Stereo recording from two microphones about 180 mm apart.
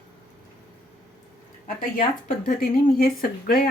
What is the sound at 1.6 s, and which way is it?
Speech, 50° left (ahead or behind).